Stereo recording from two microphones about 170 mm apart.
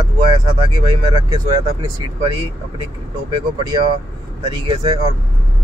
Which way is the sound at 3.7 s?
30° right (ahead or behind).